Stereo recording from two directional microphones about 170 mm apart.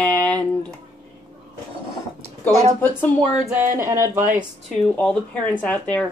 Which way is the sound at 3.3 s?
5° right (ahead or behind).